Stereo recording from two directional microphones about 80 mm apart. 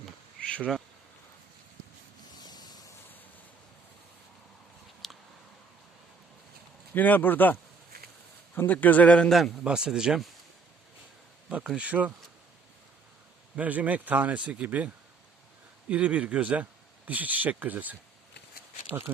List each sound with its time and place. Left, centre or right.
0.3 s bee: centre
2.4 s a sound: left
5.0 s a sound: centre
6.9 s a man's voice: left
9.6 s a man's voice: centre
11.4 s a man's voice: centre
13.6 s a man's voice: centre
15.9 s a man's voice: centre